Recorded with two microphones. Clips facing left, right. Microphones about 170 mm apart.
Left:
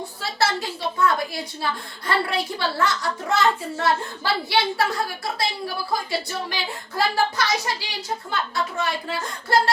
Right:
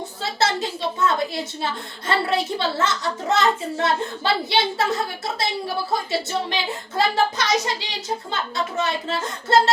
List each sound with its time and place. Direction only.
0.2 s a woman's voice: 20° right (ahead or behind)